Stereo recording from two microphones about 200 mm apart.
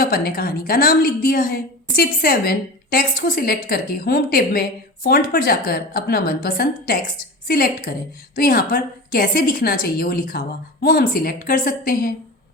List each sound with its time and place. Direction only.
0.0 s a woman's voice: 50° left (ahead or behind)